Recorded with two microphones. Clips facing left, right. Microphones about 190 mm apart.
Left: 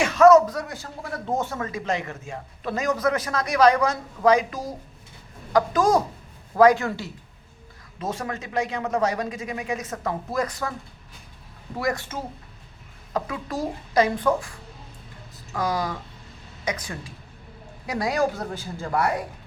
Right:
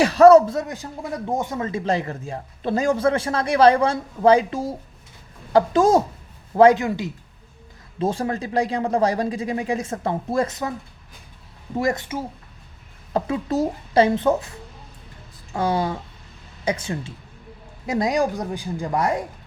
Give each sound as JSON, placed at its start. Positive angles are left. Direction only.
{"t": 0.0, "sound": "speech", "side_deg": -35}
{"t": 6.8, "sound": "speech", "side_deg": -15}
{"t": 7.9, "sound": "speech", "side_deg": -30}
{"t": 11.8, "sound": "speech", "side_deg": -25}
{"t": 13.1, "sound": "speech", "side_deg": -25}